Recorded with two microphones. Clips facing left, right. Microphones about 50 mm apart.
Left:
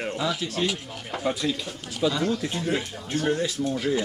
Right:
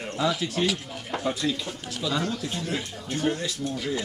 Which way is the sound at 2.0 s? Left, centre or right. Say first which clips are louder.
Left 4 dB; left.